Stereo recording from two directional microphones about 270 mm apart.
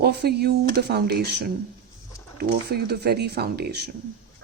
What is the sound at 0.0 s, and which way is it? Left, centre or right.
Speech, right.